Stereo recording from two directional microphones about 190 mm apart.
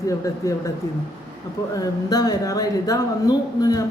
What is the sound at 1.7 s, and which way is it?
A woman's voice, 20° left (ahead or behind).